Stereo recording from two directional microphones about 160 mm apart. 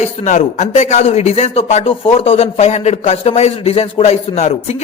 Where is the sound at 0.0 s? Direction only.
50° left (ahead or behind).